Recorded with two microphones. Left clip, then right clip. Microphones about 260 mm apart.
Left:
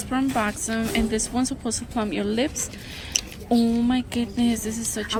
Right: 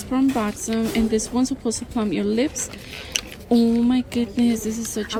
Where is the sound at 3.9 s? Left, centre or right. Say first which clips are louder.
Right 3 dB; right.